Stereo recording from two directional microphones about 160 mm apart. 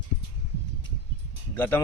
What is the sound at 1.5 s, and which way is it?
Speech, 10° left (ahead or behind).